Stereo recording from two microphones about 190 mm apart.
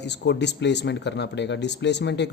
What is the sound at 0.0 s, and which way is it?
Speech, 65° left (ahead or behind).